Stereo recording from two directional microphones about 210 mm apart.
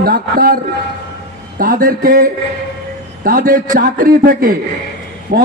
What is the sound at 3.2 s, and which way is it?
A man's voice, 40° right (ahead or behind).